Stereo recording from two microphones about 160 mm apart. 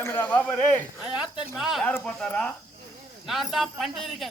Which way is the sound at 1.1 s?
5° right (ahead or behind).